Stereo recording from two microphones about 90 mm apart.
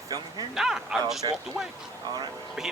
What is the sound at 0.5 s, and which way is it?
Speech, 5° right (ahead or behind).